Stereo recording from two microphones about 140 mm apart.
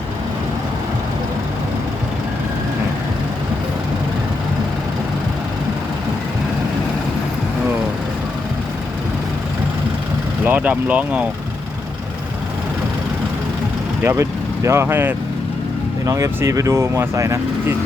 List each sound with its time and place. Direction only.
10.4 s speech: 10° right (ahead or behind)
14.0 s speech: 20° right (ahead or behind)